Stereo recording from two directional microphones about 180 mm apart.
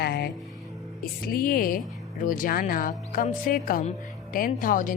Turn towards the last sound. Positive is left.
turn(degrees=50)  # may be behind; listen again after turning